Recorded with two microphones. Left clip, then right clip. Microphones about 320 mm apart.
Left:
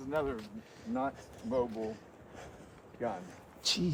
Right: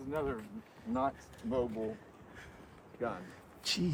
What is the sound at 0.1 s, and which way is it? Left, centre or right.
Speech, centre.